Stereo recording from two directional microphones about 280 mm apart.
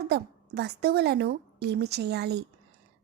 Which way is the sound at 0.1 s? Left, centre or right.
Right.